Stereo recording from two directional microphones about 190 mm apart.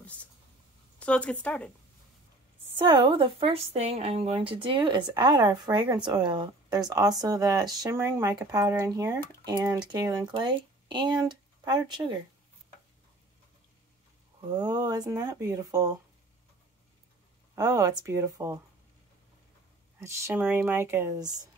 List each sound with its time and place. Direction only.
0.9 s a woman's voice: 5° left (ahead or behind)
2.8 s a woman's voice: 25° right (ahead or behind)
14.5 s a woman's voice: 20° right (ahead or behind)
17.6 s speech: 20° right (ahead or behind)
20.0 s speech: 10° right (ahead or behind)